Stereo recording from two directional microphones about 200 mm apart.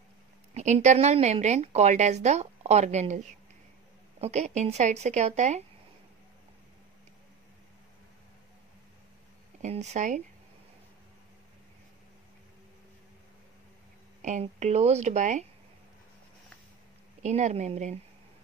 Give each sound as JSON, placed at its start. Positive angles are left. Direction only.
{"t": 0.6, "sound": "a woman's voice", "side_deg": -35}
{"t": 9.6, "sound": "speech", "side_deg": -35}
{"t": 14.2, "sound": "a woman's voice", "side_deg": -35}
{"t": 17.2, "sound": "a woman's voice", "side_deg": -35}